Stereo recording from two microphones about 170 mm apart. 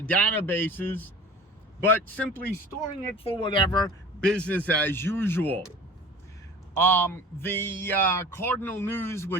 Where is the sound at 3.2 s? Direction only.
30° left (ahead or behind).